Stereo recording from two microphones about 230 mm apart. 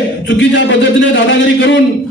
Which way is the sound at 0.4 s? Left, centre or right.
Left.